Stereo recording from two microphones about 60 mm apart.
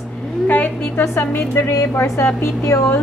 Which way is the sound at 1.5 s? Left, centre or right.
Left.